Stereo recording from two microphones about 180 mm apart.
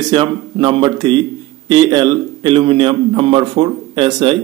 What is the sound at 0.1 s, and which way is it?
A man's voice, 30° right (ahead or behind).